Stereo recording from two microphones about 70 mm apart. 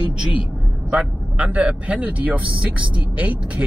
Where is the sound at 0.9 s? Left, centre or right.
Centre.